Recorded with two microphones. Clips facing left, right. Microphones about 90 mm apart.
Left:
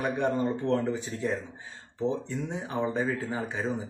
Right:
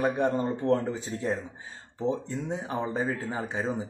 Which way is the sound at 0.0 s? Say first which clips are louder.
Right 1 dB; 30° right (ahead or behind).